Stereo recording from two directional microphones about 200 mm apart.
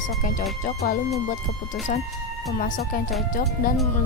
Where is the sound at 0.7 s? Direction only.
45° left (ahead or behind).